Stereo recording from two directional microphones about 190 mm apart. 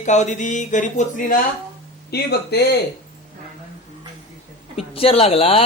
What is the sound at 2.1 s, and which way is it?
Speech, 60° left (ahead or behind).